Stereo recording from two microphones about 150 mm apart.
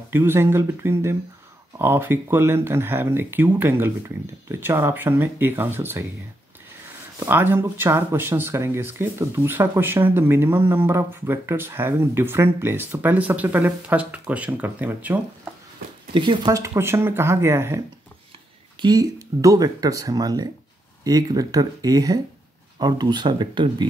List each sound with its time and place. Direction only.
0.1 s speech: 15° right (ahead or behind)
7.2 s speech: 15° right (ahead or behind)
16.1 s speech: 30° right (ahead or behind); by 17.7 s 15° right (ahead or behind)
18.8 s speech: 25° right (ahead or behind)